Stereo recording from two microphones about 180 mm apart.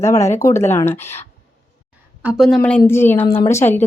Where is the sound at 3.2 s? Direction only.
30° left (ahead or behind).